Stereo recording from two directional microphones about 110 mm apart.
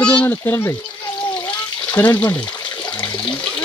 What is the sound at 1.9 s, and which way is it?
Speech, 20° left (ahead or behind).